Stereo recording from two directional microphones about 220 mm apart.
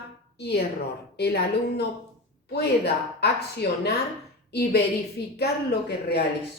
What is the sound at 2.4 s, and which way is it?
A woman's voice, 50° left (ahead or behind).